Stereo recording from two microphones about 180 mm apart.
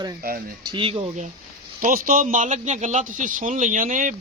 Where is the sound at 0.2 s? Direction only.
60° right (ahead or behind).